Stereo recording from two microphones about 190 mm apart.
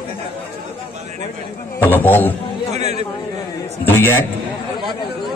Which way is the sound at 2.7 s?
35° right (ahead or behind).